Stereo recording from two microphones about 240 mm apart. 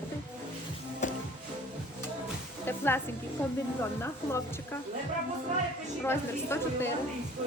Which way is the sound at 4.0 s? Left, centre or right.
Centre.